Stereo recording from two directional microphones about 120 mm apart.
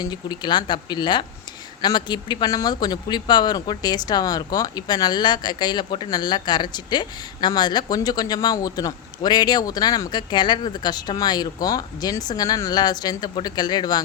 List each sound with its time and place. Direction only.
0.0 s speech: 35° left (ahead or behind)